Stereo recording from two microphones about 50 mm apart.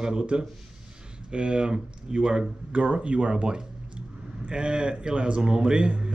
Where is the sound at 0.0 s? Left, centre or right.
Centre.